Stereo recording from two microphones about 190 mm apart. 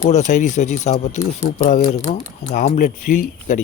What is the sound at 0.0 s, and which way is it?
Speech, 40° left (ahead or behind).